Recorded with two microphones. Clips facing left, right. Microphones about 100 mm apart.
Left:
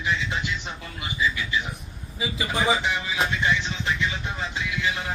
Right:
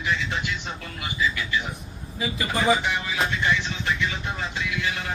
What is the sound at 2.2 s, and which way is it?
Speech, 10° left (ahead or behind).